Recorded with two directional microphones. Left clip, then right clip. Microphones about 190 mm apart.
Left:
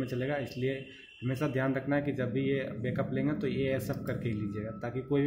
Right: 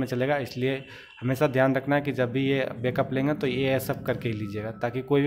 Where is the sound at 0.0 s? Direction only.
50° right (ahead or behind).